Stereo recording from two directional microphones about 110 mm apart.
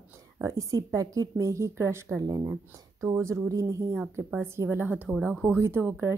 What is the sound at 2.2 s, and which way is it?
Speech, 40° right (ahead or behind).